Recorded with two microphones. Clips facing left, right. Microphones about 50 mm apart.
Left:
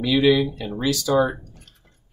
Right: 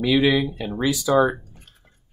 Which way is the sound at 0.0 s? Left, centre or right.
Centre.